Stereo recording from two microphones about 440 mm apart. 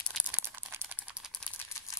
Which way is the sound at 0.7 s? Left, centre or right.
Centre.